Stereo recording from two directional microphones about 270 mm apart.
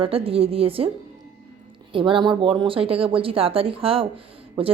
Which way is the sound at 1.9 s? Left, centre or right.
Centre.